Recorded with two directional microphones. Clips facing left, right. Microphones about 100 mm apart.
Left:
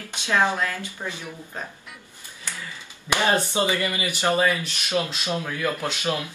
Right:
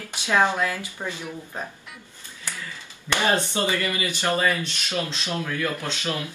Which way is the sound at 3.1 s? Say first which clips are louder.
Left 1 dB; 15° left (ahead or behind).